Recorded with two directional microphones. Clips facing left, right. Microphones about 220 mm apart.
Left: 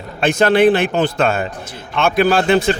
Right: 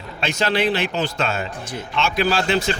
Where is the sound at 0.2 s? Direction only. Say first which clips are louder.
Left 9 dB; 50° left (ahead or behind).